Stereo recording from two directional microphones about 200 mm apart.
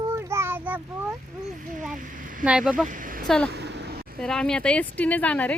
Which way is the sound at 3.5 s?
60° right (ahead or behind).